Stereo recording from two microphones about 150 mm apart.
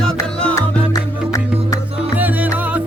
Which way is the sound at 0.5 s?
20° left (ahead or behind).